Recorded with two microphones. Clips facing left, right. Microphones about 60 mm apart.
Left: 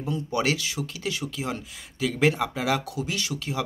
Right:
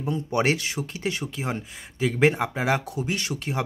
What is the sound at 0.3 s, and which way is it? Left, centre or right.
Speech, right.